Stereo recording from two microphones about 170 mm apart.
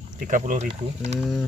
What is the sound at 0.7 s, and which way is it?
Speech, 40° right (ahead or behind).